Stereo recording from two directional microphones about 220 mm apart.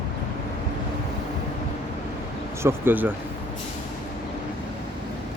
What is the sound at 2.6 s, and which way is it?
Speech, 10° right (ahead or behind).